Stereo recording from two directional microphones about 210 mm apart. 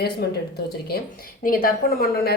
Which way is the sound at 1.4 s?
40° left (ahead or behind).